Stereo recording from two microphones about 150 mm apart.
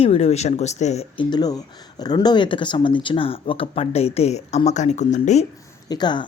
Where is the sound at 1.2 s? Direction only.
25° left (ahead or behind); by 5.5 s 50° left (ahead or behind).